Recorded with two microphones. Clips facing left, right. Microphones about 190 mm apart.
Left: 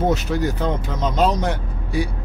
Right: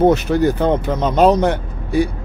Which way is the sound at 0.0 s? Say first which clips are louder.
Right 7 dB; 60° right (ahead or behind).